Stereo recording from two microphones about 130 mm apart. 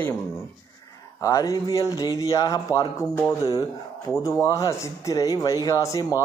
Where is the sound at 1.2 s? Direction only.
25° left (ahead or behind).